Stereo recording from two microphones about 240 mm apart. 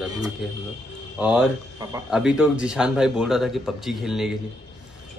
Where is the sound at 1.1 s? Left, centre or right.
Centre.